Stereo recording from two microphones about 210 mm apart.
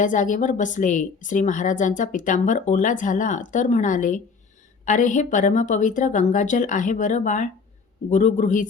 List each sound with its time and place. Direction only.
0.0 s a woman's voice: 35° left (ahead or behind)